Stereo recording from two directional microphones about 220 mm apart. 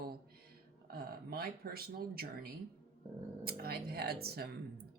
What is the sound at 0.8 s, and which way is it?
Speech, 45° right (ahead or behind).